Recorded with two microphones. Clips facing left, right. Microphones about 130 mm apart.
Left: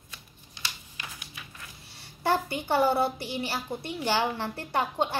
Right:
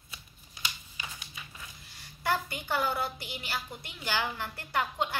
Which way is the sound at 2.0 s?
30° left (ahead or behind).